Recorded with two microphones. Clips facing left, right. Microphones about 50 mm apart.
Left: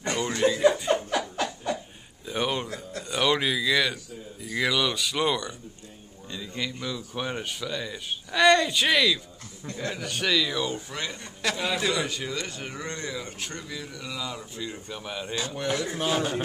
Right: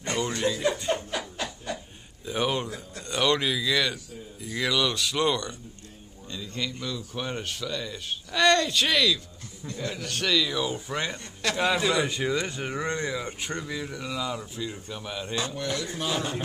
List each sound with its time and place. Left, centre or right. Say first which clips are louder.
0.3 s speech: left 8 dB; centre
2.2 s a sound: right 1 dB; centre
3.0 s speech: even; centre
10.9 s speech: right 3 dB; centre
15.5 s a man's voice: left 3 dB; centre